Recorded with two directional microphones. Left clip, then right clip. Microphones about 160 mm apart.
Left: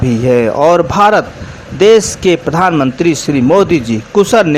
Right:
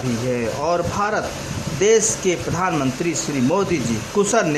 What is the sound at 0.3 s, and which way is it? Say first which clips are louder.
Speech: left 13 dB; 35° left (ahead or behind).